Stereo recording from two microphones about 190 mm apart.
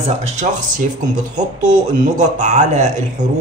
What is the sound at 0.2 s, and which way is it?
Speech, 40° right (ahead or behind).